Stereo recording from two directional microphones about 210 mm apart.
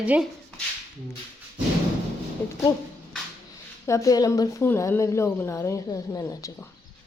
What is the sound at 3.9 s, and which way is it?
A woman's voice, 15° left (ahead or behind).